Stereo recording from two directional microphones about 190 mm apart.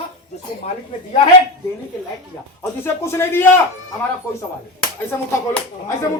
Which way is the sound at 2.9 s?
10° left (ahead or behind).